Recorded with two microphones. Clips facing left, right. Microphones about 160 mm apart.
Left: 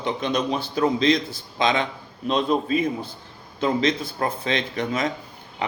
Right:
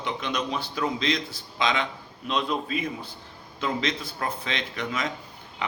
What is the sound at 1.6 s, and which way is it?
Speech, 45° left (ahead or behind).